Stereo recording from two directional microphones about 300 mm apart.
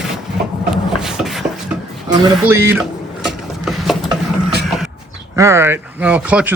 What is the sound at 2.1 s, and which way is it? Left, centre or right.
Speech, centre.